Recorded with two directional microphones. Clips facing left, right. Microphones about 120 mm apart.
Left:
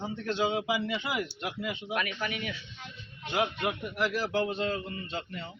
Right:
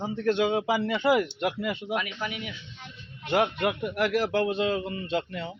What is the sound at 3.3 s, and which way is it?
Speech, 60° right (ahead or behind).